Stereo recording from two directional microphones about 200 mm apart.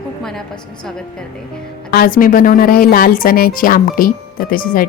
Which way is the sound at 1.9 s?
45° left (ahead or behind).